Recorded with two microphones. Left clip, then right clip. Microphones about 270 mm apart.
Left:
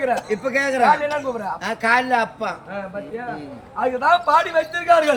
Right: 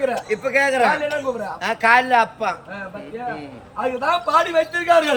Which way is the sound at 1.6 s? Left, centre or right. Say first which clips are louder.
Right 3 dB; centre.